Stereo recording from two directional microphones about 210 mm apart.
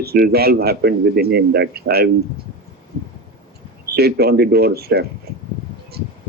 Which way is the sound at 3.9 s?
50° right (ahead or behind).